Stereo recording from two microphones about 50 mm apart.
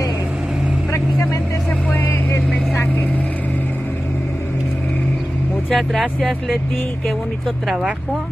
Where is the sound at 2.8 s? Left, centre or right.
Left.